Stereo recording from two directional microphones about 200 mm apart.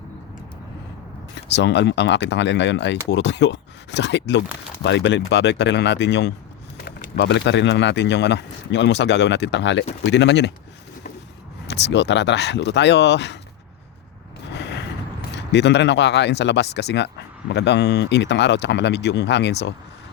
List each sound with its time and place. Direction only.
1.5 s speech: 60° left (ahead or behind)
11.6 s speech: 60° left (ahead or behind)
14.5 s a sound: 60° left (ahead or behind)
15.4 s speech: 60° left (ahead or behind)